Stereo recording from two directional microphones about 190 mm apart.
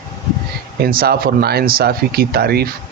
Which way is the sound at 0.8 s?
50° right (ahead or behind).